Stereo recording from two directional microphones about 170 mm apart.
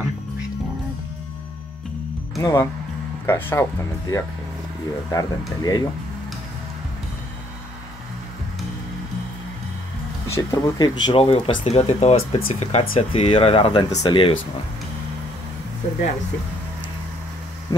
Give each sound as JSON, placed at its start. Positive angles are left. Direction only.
{"t": 2.3, "sound": "speech", "side_deg": 20}
{"t": 5.1, "sound": "speech", "side_deg": 20}
{"t": 10.2, "sound": "speech", "side_deg": 15}
{"t": 17.7, "sound": "speech", "side_deg": 20}